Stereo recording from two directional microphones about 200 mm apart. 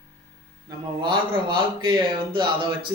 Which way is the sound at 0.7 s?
25° right (ahead or behind).